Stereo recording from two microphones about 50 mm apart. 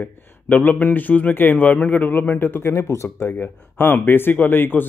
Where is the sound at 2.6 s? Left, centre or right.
Left.